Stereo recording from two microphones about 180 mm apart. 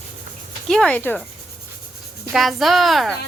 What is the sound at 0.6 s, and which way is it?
Speech, 5° left (ahead or behind).